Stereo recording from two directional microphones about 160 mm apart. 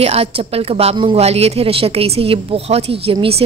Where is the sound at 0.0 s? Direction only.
40° right (ahead or behind).